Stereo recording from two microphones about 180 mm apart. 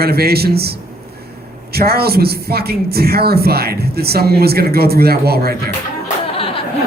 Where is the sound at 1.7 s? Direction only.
60° right (ahead or behind).